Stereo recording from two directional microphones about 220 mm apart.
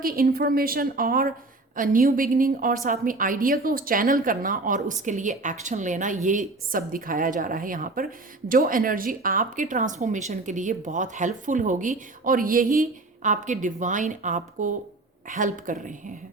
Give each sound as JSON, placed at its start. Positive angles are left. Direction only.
{"t": 0.0, "sound": "a woman's voice", "side_deg": -40}